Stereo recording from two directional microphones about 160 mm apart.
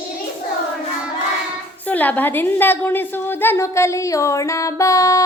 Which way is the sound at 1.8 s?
10° left (ahead or behind).